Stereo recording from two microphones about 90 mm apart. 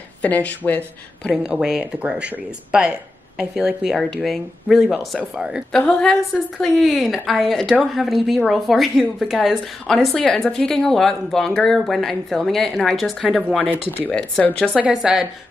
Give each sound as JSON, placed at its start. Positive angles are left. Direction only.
{"t": 0.2, "sound": "speech", "side_deg": 15}
{"t": 1.3, "sound": "a woman's voice", "side_deg": -10}
{"t": 5.7, "sound": "a woman's voice", "side_deg": 10}
{"t": 14.9, "sound": "a woman's voice", "side_deg": -5}